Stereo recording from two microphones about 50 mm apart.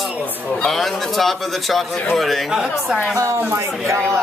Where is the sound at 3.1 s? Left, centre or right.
Right.